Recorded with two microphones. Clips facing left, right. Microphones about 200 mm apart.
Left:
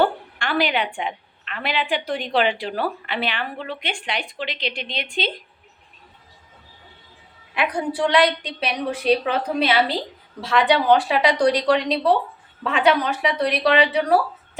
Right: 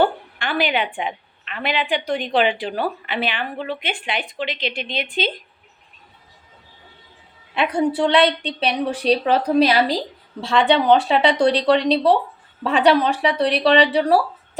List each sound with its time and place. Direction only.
0.0 s a woman's voice: centre (ahead or behind)
7.5 s a woman's voice: 25° right (ahead or behind)
10.4 s a woman's voice: 30° right (ahead or behind)